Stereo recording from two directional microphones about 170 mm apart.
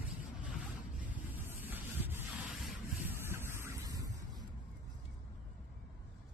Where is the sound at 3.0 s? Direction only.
15° right (ahead or behind).